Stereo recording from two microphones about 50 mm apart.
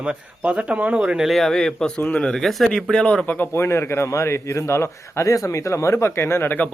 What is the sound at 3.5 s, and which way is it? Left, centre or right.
Speech, left.